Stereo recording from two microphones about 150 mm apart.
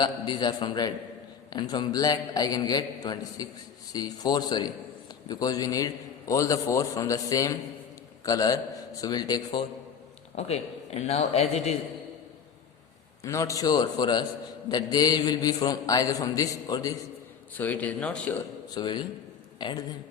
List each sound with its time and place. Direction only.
0.0 s a man's voice: 30° left (ahead or behind)
10.3 s speech: 45° left (ahead or behind)
13.2 s a man's voice: 20° left (ahead or behind)
17.5 s speech: 10° left (ahead or behind)
18.7 s a man's voice: 30° left (ahead or behind)